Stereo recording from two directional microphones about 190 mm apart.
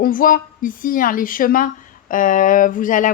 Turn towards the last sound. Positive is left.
turn(degrees=45)  # may be behind; listen again after turning